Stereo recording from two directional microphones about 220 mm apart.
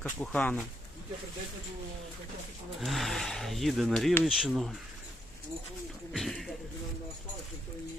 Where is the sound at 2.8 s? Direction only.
Centre (ahead or behind).